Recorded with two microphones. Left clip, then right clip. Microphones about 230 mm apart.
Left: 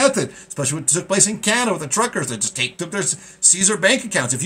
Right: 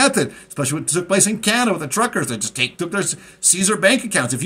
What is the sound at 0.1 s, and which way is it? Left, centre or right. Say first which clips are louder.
Speech: right 2 dB; centre.